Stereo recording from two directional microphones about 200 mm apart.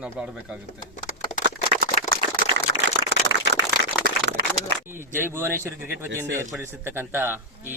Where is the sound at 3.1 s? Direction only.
65° right (ahead or behind).